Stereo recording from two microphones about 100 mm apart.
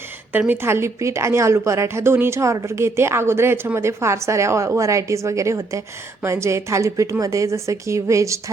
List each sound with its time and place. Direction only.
0.3 s a woman's voice: 20° right (ahead or behind)